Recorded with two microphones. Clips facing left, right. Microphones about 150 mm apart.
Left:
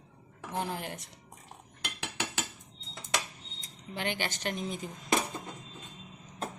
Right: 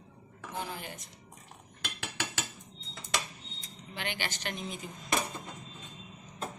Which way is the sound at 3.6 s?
45° left (ahead or behind).